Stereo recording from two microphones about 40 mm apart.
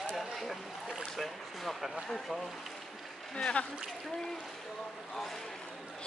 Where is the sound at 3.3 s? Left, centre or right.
Left.